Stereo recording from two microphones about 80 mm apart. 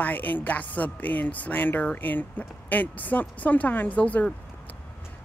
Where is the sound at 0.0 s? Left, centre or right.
Left.